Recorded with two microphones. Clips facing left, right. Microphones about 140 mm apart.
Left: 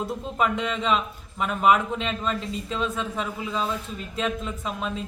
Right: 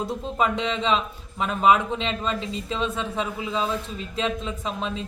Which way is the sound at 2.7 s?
30° right (ahead or behind).